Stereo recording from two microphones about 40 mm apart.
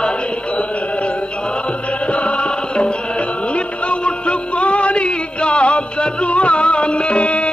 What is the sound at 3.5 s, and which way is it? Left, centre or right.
Music, left.